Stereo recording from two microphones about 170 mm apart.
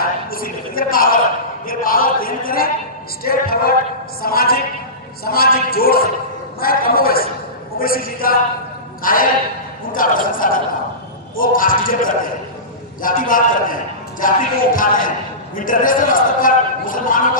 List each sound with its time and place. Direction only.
0.3 s speech: 60° left (ahead or behind)
1.6 s a sound: 55° left (ahead or behind)
3.2 s speech: 60° left (ahead or behind)
13.0 s music: 55° left (ahead or behind)
15.5 s a man's voice: 55° left (ahead or behind)